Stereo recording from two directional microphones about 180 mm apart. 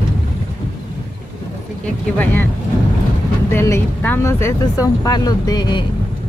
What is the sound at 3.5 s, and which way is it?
Speech, 15° left (ahead or behind).